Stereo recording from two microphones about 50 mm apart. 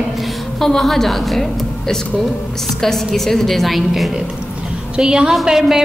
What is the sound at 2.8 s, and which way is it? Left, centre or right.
A man's voice, centre.